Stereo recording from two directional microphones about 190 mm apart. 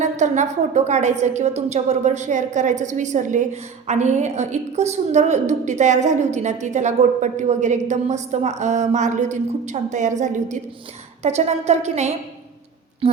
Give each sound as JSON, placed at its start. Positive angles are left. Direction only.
{"t": 0.0, "sound": "a woman's voice", "side_deg": -40}